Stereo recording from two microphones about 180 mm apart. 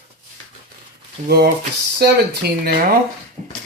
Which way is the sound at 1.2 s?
60° right (ahead or behind).